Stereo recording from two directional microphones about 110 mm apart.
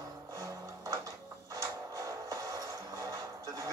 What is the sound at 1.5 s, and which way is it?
Music, 30° right (ahead or behind).